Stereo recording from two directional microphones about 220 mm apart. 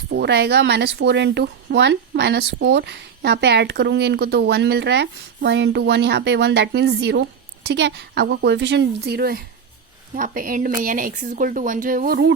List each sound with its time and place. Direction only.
0.1 s speech: 50° right (ahead or behind)